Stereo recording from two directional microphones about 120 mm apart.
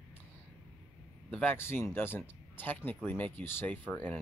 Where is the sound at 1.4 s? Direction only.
20° left (ahead or behind).